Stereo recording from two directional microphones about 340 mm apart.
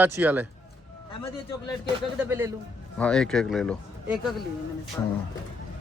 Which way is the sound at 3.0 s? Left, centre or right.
Centre.